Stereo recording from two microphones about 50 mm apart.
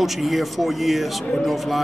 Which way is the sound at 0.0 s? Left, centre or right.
Centre.